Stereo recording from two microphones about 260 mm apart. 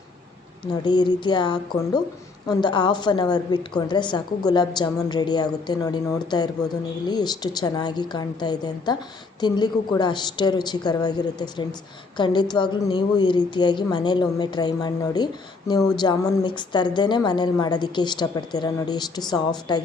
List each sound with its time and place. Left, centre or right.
0.6 s a woman's voice: centre